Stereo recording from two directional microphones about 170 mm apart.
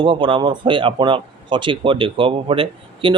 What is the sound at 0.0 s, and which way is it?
Speech, 30° right (ahead or behind).